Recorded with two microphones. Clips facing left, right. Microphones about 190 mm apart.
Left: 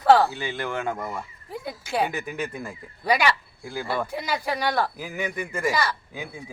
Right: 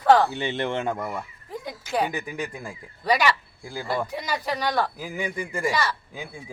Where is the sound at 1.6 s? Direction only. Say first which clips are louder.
Even; 10° left (ahead or behind).